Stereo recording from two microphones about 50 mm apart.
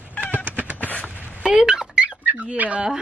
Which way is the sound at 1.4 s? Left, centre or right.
Centre.